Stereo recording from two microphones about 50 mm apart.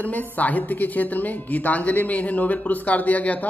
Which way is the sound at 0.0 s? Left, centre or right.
Left.